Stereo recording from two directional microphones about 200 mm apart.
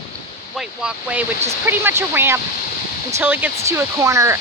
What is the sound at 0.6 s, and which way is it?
Speech, 5° right (ahead or behind).